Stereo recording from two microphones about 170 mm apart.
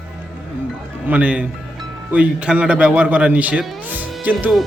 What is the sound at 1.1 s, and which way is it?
Speech, 10° right (ahead or behind).